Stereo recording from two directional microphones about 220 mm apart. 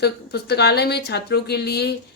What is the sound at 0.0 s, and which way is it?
Speech, 50° left (ahead or behind).